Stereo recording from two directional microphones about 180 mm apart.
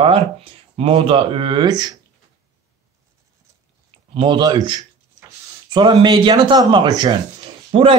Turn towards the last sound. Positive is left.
turn(degrees=-30)  # may be behind; listen again after turning